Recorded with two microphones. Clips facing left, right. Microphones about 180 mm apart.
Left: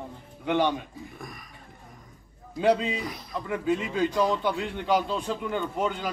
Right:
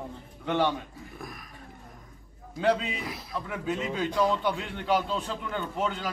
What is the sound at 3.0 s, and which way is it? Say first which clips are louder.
Speech: left 1 dB; centre (ahead or behind).